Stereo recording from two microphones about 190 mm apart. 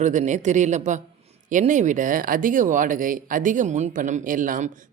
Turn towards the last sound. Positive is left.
turn(degrees=-45)  # may be behind; listen again after turning